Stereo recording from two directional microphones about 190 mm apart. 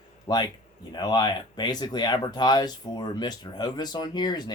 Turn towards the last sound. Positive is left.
turn(degrees=20)  # may be behind; listen again after turning